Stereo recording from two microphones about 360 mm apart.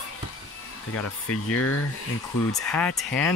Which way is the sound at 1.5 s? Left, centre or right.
Left.